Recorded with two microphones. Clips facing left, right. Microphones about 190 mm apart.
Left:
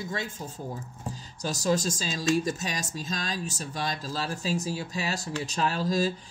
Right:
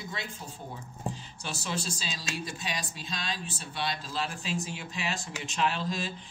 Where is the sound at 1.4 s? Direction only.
40° left (ahead or behind).